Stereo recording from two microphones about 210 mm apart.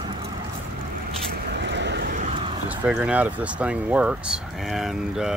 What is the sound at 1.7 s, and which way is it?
Vehicle, 55° right (ahead or behind).